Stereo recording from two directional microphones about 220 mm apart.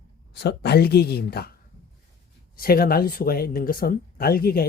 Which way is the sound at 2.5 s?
45° left (ahead or behind).